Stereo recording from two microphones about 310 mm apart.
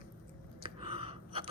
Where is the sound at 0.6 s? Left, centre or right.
Centre.